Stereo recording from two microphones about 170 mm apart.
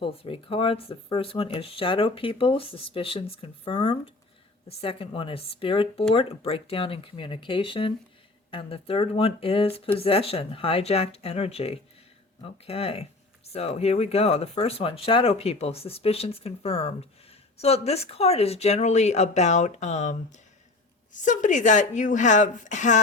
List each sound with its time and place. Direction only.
0.0 s a woman's voice: 30° left (ahead or behind)